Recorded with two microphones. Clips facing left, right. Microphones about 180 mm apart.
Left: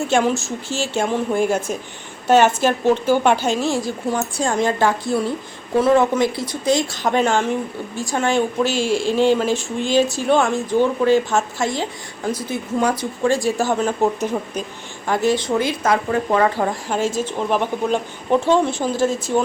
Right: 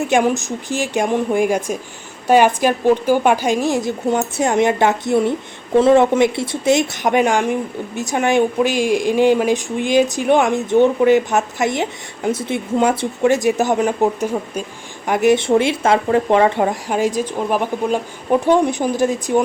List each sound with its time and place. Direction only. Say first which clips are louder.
0.1 s a woman's voice: right 2 dB; 15° right (ahead or behind)